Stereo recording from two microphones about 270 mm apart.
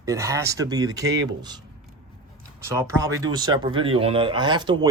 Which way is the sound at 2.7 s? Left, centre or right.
Centre.